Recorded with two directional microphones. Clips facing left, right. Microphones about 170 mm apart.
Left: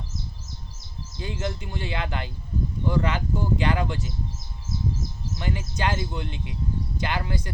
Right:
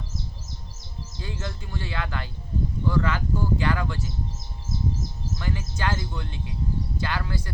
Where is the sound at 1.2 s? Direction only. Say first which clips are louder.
Left 5 dB; 20° left (ahead or behind).